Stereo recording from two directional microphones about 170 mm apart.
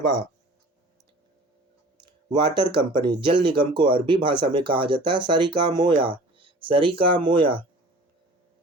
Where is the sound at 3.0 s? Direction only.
30° right (ahead or behind).